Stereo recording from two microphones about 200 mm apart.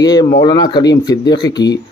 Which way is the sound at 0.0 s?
20° left (ahead or behind).